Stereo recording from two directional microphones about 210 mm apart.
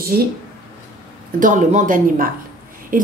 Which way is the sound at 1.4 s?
40° right (ahead or behind).